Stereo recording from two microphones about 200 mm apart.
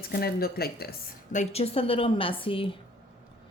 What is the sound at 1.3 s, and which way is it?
A woman's voice, 30° left (ahead or behind).